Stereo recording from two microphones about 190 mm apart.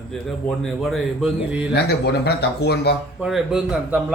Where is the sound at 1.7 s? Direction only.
60° left (ahead or behind).